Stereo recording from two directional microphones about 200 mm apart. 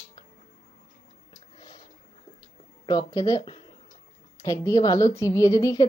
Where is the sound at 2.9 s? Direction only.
20° left (ahead or behind).